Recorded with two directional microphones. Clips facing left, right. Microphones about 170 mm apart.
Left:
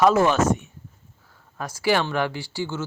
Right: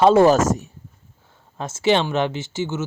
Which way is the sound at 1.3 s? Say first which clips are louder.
Right 3 dB; 25° right (ahead or behind).